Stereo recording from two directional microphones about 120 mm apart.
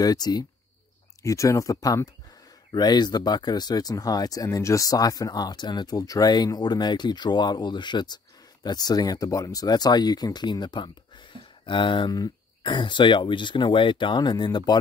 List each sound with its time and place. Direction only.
0.0 s speech: 35° left (ahead or behind)